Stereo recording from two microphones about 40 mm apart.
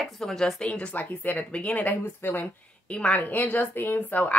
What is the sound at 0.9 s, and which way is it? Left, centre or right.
Speech, left.